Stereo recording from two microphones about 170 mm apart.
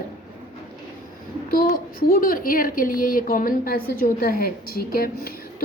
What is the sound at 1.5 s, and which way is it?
A woman's voice, 60° left (ahead or behind).